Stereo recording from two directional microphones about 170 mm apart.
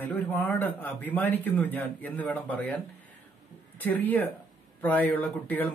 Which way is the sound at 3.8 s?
10° left (ahead or behind).